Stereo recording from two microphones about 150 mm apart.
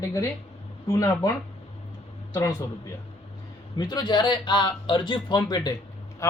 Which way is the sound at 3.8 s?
30° left (ahead or behind).